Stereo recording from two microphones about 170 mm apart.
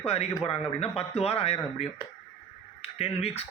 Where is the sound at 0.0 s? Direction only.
35° left (ahead or behind).